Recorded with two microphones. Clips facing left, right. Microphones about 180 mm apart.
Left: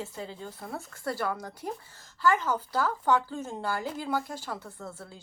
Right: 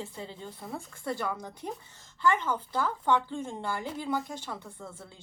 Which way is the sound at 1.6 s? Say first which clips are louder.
Left 3 dB; 10° left (ahead or behind).